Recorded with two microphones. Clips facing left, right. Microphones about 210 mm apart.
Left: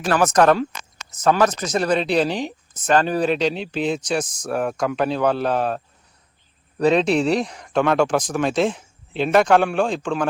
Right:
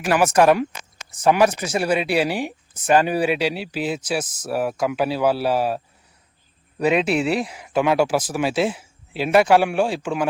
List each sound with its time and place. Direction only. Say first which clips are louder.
0.0 s speech: even; 10° right (ahead or behind)